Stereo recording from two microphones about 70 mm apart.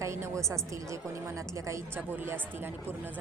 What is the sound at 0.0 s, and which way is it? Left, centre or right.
A woman's voice, right.